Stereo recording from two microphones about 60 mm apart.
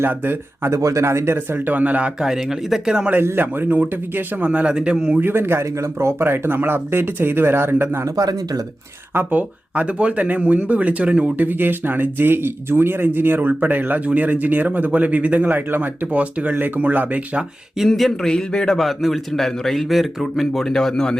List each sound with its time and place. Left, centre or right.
0.0 s speech: right
0.7 s speech: right
1.6 s speech: right
2.2 s speech: centre
3.3 s speech: right; by 5.2 s centre
5.2 s speech: right
6.2 s speech: right
8.1 s speech: right
9.1 s speech: right
11.4 s speech: right
17.8 s a man's voice: centre
18.8 s a man's voice: centre